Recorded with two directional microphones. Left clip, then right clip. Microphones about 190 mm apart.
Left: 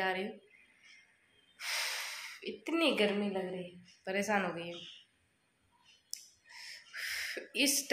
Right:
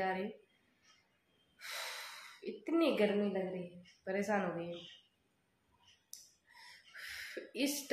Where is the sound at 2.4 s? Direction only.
Centre (ahead or behind).